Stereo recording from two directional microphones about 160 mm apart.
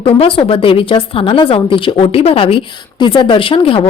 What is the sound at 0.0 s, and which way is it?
A woman's voice, 35° left (ahead or behind).